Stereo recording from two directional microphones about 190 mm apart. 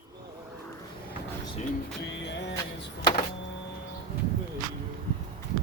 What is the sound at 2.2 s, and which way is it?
Music, 65° left (ahead or behind).